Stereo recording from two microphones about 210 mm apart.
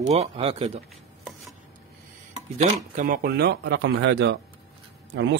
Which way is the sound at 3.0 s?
45° right (ahead or behind).